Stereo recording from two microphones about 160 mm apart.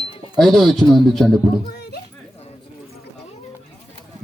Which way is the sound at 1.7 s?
90° left.